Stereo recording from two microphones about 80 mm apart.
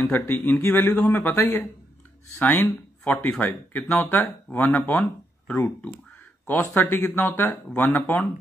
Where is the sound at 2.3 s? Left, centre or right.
Left.